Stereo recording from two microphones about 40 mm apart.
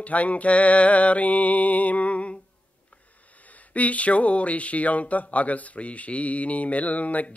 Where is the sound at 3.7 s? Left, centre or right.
Left.